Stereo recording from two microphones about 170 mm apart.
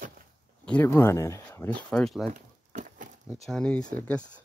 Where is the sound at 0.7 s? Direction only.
10° left (ahead or behind).